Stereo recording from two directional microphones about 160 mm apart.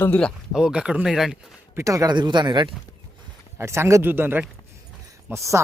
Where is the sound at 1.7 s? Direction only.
20° right (ahead or behind).